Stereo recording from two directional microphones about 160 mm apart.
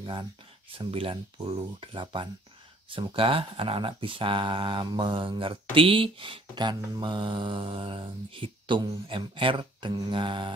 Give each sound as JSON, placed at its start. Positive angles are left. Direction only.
{"t": 0.0, "sound": "speech", "side_deg": -30}